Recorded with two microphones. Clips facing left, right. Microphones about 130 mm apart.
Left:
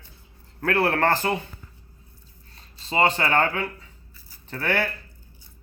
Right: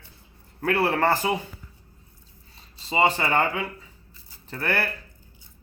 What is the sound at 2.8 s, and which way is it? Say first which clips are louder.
A man's voice: even; centre (ahead or behind).